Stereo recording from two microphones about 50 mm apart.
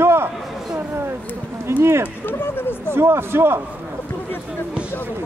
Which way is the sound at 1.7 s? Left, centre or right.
Right.